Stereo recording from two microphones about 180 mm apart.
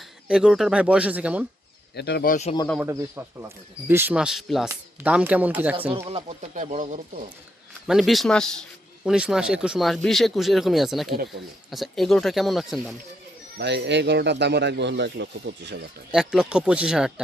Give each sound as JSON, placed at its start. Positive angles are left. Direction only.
{"t": 0.3, "sound": "speech", "side_deg": -5}
{"t": 2.0, "sound": "speech", "side_deg": 65}
{"t": 2.8, "sound": "speech", "side_deg": -15}
{"t": 6.1, "sound": "speech", "side_deg": -35}
{"t": 7.9, "sound": "speech", "side_deg": 0}
{"t": 13.6, "sound": "a man's voice", "side_deg": -70}
{"t": 16.1, "sound": "speech", "side_deg": -5}